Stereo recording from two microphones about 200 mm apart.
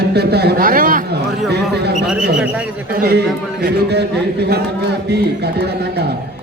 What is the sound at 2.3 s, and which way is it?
Speech, 5° right (ahead or behind).